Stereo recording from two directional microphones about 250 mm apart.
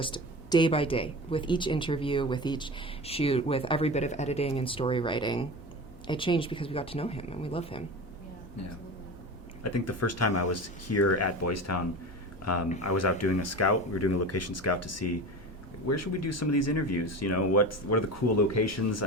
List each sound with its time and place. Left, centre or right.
0.0 s speech: centre
9.6 s speech: left